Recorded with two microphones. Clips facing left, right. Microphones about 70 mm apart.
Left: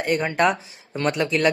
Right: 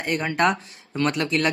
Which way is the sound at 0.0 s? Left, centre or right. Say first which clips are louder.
Left 2 dB; centre.